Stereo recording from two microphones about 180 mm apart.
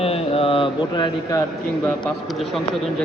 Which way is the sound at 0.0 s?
30° left (ahead or behind).